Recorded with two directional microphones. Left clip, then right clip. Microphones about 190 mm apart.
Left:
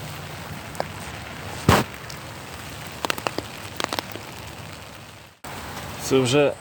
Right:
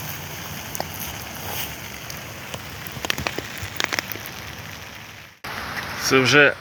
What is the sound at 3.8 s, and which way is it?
Rain on surface, 65° left (ahead or behind).